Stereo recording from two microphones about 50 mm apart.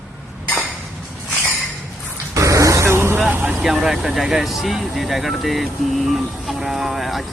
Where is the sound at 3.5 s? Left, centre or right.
Centre.